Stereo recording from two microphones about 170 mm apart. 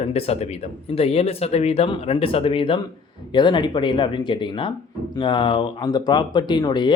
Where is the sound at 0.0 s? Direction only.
35° left (ahead or behind).